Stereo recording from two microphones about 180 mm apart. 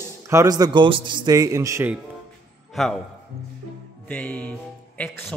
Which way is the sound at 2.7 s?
Centre (ahead or behind).